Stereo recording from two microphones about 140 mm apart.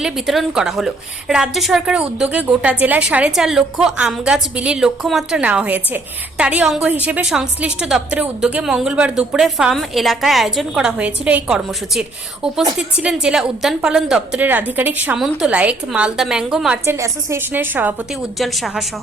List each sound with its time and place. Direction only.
0.0 s a woman's voice: 5° right (ahead or behind)
16.8 s a woman's voice: 20° right (ahead or behind)
18.3 s a woman's voice: centre (ahead or behind)